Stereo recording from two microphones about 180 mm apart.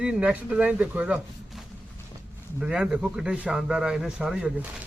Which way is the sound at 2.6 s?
5° right (ahead or behind).